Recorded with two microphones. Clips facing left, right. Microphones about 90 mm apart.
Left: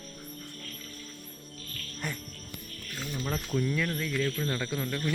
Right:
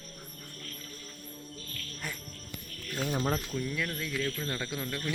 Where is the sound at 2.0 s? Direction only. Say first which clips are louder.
Left 4 dB; centre (ahead or behind).